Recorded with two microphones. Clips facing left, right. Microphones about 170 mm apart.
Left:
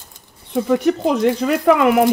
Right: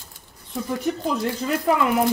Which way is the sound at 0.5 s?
75° left (ahead or behind).